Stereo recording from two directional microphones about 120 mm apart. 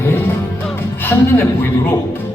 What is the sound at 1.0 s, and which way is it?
A woman's voice, 15° left (ahead or behind).